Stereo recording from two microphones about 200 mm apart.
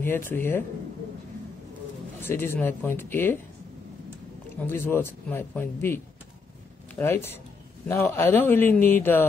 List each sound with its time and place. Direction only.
0.0 s speech: 10° left (ahead or behind)
2.2 s speech: 10° left (ahead or behind)
4.6 s speech: 10° left (ahead or behind)
7.0 s speech: 10° left (ahead or behind)